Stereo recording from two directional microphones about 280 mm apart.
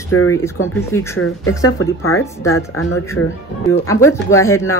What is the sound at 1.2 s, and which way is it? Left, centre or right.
Speech, left.